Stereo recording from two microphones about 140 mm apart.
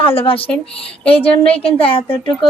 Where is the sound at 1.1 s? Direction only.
10° left (ahead or behind).